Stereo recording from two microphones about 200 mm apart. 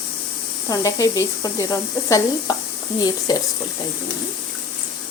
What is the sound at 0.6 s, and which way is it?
Speech, 15° left (ahead or behind).